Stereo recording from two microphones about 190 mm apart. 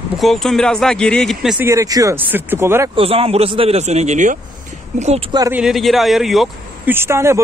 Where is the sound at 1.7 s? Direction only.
15° right (ahead or behind).